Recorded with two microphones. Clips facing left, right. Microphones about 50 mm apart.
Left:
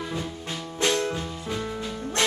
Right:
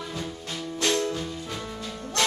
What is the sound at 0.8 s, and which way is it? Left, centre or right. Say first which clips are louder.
Music: left 1 dB; left.